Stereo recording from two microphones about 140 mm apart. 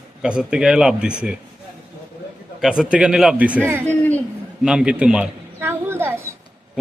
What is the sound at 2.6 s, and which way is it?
A man's voice, 5° right (ahead or behind).